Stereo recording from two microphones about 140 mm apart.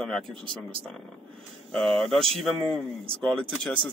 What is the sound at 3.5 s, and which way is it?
Speech, 5° left (ahead or behind).